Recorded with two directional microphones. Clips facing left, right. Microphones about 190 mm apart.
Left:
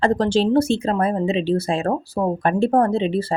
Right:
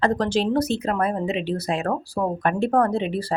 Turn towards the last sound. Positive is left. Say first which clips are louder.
# left 4 dB
turn(degrees=25)  # may be behind; listen again after turning